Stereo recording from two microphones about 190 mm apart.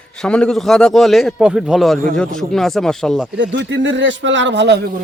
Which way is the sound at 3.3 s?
75° right (ahead or behind).